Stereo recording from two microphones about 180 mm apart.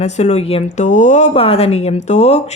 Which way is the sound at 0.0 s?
40° left (ahead or behind).